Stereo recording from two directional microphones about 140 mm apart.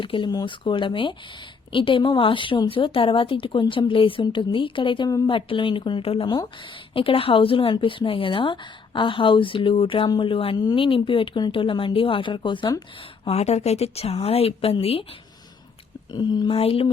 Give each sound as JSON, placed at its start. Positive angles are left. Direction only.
{"t": 0.0, "sound": "speech", "side_deg": 35}
{"t": 13.2, "sound": "speech", "side_deg": 50}
{"t": 16.1, "sound": "speech", "side_deg": 30}
{"t": 16.6, "sound": "speech", "side_deg": 45}